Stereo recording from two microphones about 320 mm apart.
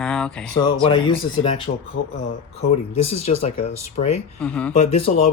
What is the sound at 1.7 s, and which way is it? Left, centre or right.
Speech, left.